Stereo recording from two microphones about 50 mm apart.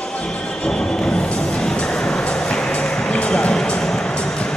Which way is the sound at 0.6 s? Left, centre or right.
Centre.